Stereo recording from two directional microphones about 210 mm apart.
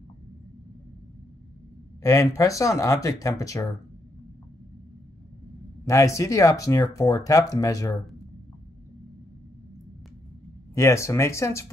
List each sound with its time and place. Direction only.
2.0 s speech: 15° left (ahead or behind)
5.9 s speech: 15° left (ahead or behind)
10.7 s speech: 15° left (ahead or behind)